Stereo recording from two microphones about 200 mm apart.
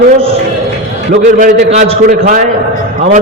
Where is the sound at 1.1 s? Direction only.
40° right (ahead or behind).